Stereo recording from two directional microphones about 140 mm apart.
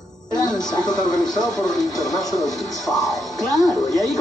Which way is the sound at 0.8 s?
30° left (ahead or behind).